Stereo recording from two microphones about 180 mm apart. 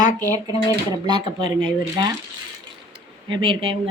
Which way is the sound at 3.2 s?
25° right (ahead or behind).